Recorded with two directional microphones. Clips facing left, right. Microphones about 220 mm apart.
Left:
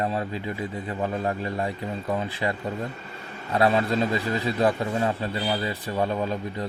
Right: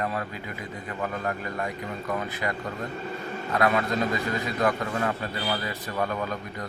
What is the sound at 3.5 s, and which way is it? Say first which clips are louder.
A man's voice: left 3 dB; 30° left (ahead or behind).